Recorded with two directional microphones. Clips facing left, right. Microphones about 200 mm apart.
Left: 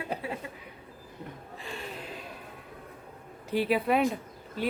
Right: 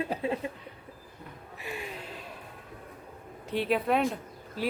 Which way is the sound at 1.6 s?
15° right (ahead or behind).